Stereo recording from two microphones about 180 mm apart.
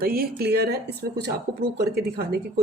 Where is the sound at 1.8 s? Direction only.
65° right (ahead or behind).